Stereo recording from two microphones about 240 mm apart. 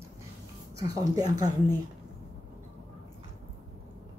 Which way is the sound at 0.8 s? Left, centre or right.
Centre.